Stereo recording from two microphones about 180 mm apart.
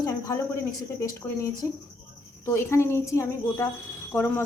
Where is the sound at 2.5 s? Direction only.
15° left (ahead or behind).